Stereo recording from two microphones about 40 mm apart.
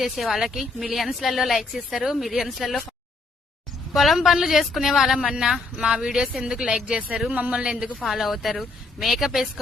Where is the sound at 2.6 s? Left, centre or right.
Centre.